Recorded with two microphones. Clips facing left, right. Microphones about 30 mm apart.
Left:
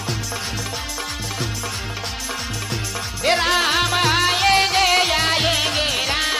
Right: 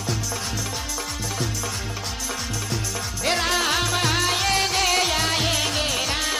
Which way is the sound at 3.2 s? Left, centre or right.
Centre.